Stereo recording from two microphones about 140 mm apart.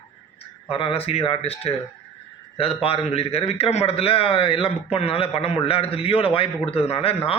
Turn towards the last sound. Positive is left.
turn(degrees=45)  # may be behind; listen again after turning